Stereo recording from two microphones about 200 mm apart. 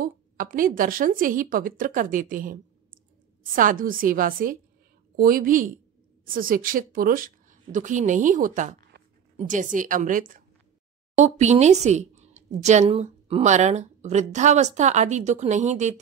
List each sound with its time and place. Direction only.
0.0 s a woman's voice: 45° right (ahead or behind)
9.0 s a sound: 55° right (ahead or behind)
9.5 s a woman's voice: 40° right (ahead or behind)